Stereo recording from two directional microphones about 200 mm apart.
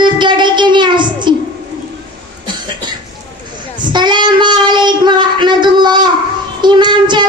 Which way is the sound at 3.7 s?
20° right (ahead or behind).